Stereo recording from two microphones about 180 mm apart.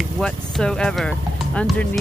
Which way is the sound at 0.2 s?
5° left (ahead or behind).